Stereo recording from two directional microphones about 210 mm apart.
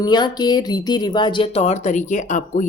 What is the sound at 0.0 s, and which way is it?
Speech, 20° left (ahead or behind).